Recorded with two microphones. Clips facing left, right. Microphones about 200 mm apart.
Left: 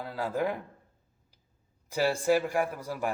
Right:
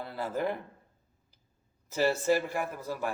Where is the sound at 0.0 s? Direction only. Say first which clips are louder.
Left 2 dB; 10° left (ahead or behind).